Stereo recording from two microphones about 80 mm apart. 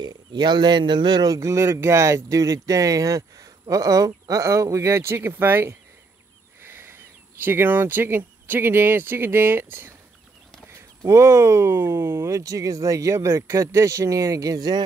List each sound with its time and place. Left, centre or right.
0.0 s speech: right
11.1 s speech: right